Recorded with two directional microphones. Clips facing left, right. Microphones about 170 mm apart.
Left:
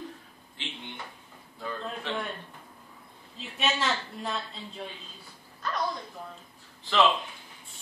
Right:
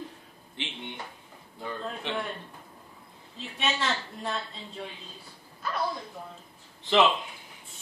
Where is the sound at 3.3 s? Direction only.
Centre (ahead or behind).